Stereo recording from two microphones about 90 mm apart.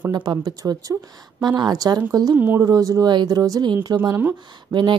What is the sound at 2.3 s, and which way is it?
Speech, 20° right (ahead or behind).